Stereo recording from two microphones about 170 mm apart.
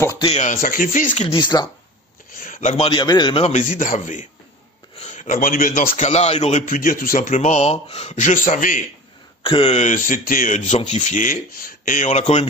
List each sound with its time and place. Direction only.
0.2 s speech: 40° left (ahead or behind)
2.3 s speech: 50° left (ahead or behind); by 3.5 s 30° left (ahead or behind)
3.5 s a man's voice: 50° left (ahead or behind)
9.4 s a man's voice: 30° left (ahead or behind)